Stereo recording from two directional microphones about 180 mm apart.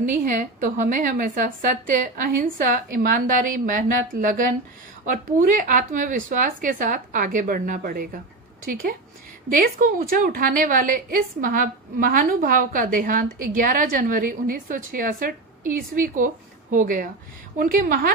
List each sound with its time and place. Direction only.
0.1 s a woman's voice: 50° right (ahead or behind)
9.5 s a woman's voice: 50° right (ahead or behind)